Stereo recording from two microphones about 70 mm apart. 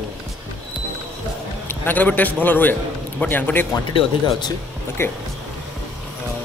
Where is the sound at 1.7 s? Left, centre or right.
Left.